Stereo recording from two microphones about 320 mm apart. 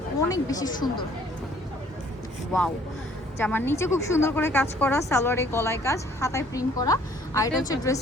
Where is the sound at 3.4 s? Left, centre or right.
Centre.